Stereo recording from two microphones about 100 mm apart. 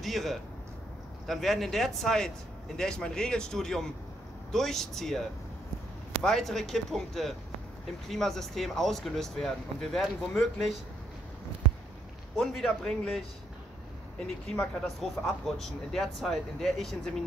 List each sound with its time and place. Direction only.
0.0 s speech: centre (ahead or behind)
6.2 s speech: 5° left (ahead or behind)
12.4 s speech: centre (ahead or behind)
14.2 s speech: 5° left (ahead or behind)